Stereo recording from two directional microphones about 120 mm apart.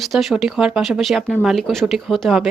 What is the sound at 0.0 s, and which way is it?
Speech, centre (ahead or behind).